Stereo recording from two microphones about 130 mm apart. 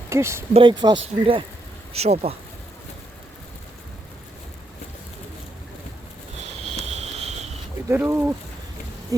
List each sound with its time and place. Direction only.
0.1 s speech: 20° right (ahead or behind)
0.5 s speech: 40° right (ahead or behind)
1.9 s speech: 55° right (ahead or behind)
6.7 s a sound: 55° right (ahead or behind)
7.9 s speech: 15° right (ahead or behind)